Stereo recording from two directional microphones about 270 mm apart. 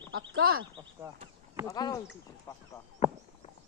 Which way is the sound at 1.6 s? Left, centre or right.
Centre.